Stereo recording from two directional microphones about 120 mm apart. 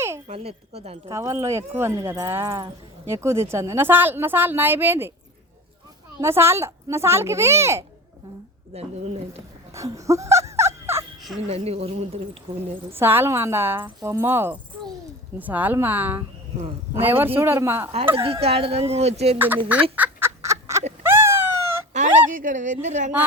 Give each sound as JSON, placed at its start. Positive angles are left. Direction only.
{"t": 0.3, "sound": "speech", "side_deg": -55}
{"t": 1.1, "sound": "a woman's voice", "side_deg": -25}
{"t": 6.1, "sound": "a woman's voice", "side_deg": -20}
{"t": 8.7, "sound": "speech", "side_deg": -60}
{"t": 9.7, "sound": "fowl", "side_deg": -25}
{"t": 11.4, "sound": "speech", "side_deg": -60}
{"t": 12.9, "sound": "a woman's voice", "side_deg": -20}
{"t": 18.2, "sound": "speech", "side_deg": -55}
{"t": 19.6, "sound": "fowl", "side_deg": -15}
{"t": 21.0, "sound": "cat", "side_deg": -20}
{"t": 22.3, "sound": "speech", "side_deg": -90}